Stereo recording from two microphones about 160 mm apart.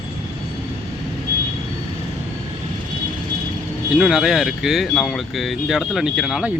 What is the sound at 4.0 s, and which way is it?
Speech, 5° right (ahead or behind).